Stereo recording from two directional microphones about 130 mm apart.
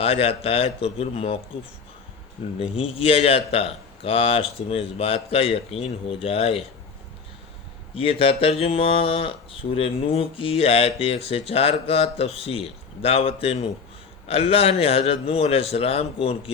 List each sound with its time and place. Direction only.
0.0 s speech: 50° left (ahead or behind)
2.6 s speech: 45° left (ahead or behind)
7.9 s speech: 45° left (ahead or behind)